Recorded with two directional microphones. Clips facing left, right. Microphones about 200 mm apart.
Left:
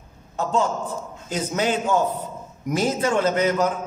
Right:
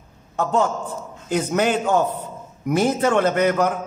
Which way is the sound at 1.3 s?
60° right (ahead or behind).